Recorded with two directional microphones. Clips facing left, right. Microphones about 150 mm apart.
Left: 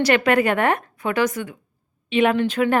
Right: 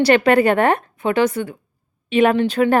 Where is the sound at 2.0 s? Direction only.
40° right (ahead or behind).